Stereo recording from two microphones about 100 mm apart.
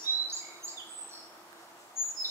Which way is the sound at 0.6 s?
35° left (ahead or behind).